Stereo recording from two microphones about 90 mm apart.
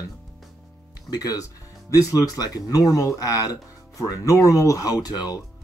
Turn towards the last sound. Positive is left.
turn(degrees=45)  # may be behind; listen again after turning